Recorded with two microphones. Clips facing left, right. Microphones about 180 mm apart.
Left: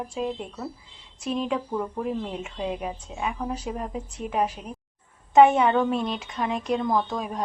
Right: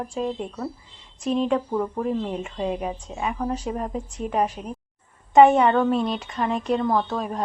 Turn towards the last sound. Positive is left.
turn(degrees=5)  # may be behind; listen again after turning